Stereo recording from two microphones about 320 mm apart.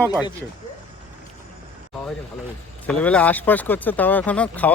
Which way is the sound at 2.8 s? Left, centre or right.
Centre.